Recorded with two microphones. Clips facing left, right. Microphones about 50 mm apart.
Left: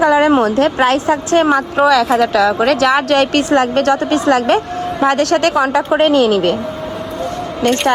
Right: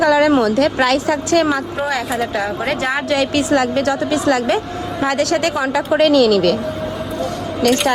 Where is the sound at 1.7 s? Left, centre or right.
Left.